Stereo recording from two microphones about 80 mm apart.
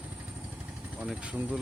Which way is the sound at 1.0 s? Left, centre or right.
Centre.